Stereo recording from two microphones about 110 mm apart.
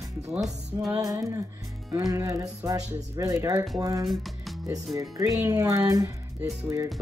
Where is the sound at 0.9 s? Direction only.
30° right (ahead or behind).